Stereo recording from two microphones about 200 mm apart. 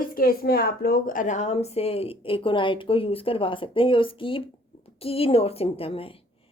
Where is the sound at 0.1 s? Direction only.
45° left (ahead or behind).